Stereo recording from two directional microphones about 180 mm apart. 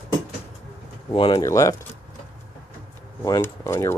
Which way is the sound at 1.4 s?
20° left (ahead or behind).